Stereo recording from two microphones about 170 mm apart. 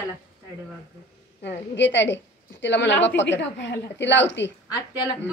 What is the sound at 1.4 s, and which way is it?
A woman's voice, 90° left.